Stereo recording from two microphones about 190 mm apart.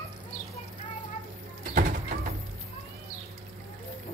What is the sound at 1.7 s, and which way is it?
Music, 45° right (ahead or behind).